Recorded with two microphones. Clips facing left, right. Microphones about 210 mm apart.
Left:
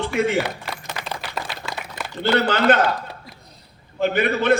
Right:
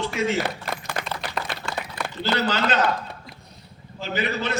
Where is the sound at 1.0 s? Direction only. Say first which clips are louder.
Even; 50° right (ahead or behind).